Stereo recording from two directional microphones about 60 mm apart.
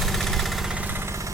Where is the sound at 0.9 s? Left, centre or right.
Right.